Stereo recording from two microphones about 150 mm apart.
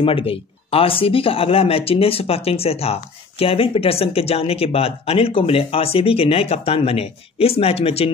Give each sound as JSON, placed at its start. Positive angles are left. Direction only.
{"t": 0.0, "sound": "speech", "side_deg": 35}